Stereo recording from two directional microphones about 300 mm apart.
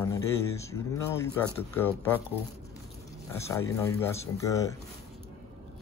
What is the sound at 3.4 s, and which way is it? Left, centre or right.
Speech, centre.